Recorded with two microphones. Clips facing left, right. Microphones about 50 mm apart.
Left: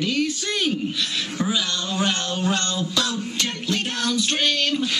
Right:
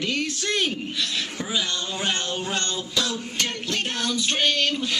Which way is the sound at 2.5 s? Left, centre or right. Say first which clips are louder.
Left 4 dB; right.